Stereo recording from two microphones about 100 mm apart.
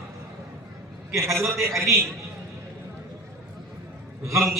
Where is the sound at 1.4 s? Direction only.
30° right (ahead or behind).